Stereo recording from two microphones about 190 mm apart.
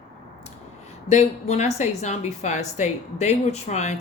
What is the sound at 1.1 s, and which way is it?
A woman's voice, 35° left (ahead or behind).